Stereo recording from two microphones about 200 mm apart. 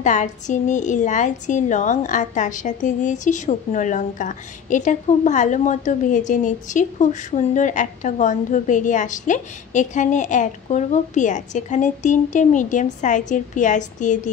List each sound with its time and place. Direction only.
0.0 s a woman's voice: 40° left (ahead or behind)